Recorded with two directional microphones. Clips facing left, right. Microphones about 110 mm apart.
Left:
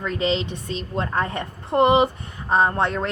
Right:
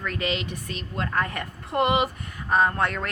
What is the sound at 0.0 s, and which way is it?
A woman's voice, 25° left (ahead or behind).